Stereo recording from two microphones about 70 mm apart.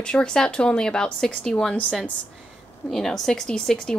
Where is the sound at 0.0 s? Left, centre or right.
Centre.